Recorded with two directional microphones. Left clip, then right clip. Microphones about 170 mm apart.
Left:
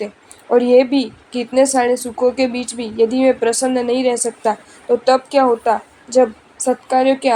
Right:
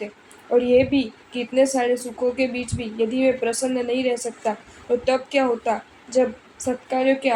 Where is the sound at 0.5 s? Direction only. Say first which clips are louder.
Left 6 dB; 35° left (ahead or behind).